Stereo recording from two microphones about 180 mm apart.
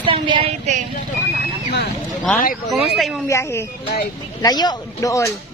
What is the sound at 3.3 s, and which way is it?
A man's voice, 15° left (ahead or behind).